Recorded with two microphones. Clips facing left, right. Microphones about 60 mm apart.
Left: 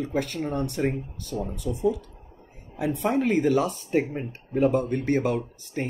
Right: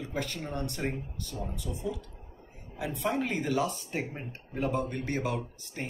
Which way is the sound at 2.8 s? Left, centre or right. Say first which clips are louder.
Left 6 dB; left.